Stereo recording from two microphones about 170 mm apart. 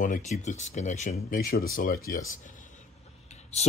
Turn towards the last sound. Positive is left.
turn(degrees=40)  # may be behind; listen again after turning